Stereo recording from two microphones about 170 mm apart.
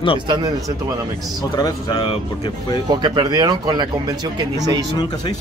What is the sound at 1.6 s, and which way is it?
Speech, 20° left (ahead or behind).